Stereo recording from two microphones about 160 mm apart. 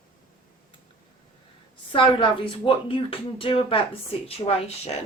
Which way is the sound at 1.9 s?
30° left (ahead or behind).